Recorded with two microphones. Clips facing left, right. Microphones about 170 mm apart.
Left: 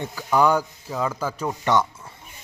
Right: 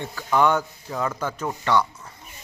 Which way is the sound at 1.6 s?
20° left (ahead or behind).